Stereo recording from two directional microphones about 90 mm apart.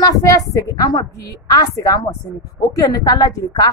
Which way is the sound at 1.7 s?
40° left (ahead or behind).